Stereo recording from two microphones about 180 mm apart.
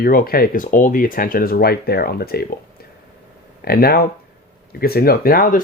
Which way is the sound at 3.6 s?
60° left (ahead or behind).